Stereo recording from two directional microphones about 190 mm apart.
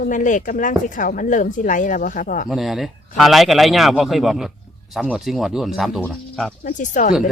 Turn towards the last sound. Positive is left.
turn(degrees=45)  # may be behind; listen again after turning